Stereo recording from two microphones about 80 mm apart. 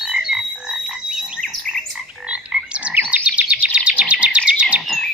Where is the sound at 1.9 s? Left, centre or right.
Centre.